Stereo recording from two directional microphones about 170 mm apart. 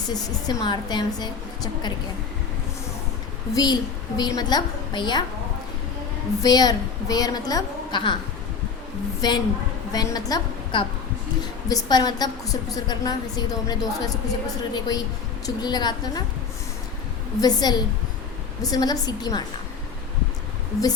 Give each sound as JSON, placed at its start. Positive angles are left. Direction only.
{"t": 0.1, "sound": "a woman's voice", "side_deg": 25}
{"t": 3.5, "sound": "a woman's voice", "side_deg": 25}
{"t": 6.4, "sound": "a woman's voice", "side_deg": 20}
{"t": 9.2, "sound": "a woman's voice", "side_deg": 25}
{"t": 17.4, "sound": "a woman's voice", "side_deg": 25}